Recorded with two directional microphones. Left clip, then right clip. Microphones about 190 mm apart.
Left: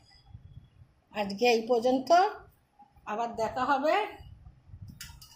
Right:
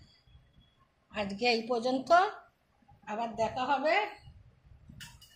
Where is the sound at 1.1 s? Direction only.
35° left (ahead or behind).